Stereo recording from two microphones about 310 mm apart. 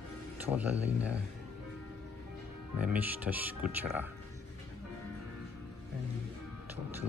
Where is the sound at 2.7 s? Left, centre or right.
Centre.